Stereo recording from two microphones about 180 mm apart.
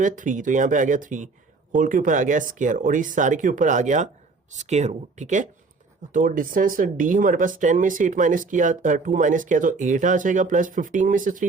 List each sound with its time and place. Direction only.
0.0 s speech: 45° right (ahead or behind)